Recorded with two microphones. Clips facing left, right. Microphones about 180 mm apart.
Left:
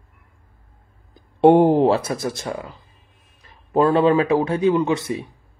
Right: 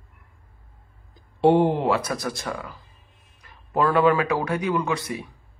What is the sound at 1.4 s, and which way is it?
Speech, 50° left (ahead or behind).